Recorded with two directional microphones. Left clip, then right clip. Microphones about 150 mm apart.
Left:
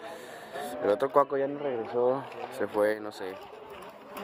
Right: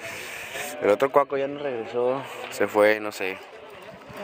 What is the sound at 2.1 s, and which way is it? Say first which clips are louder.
Speech: right 6 dB; 35° right (ahead or behind).